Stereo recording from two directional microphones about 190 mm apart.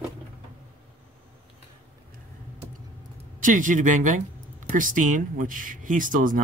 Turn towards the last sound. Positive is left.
turn(degrees=-45)  # may be behind; listen again after turning